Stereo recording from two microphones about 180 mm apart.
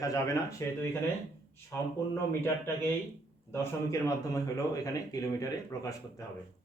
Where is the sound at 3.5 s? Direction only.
15° left (ahead or behind).